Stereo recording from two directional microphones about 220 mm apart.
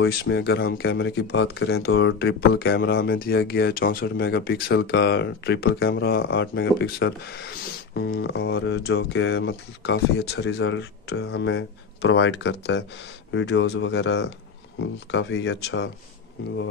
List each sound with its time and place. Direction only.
0.0 s speech: 50° left (ahead or behind)